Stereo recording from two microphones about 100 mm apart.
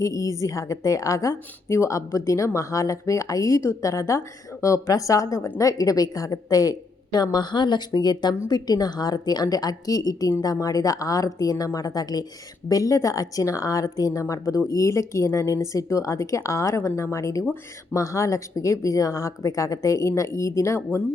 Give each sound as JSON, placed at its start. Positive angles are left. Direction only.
{"t": 0.0, "sound": "a woman's voice", "side_deg": 30}